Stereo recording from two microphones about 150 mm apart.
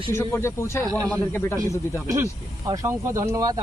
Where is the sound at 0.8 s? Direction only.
25° right (ahead or behind).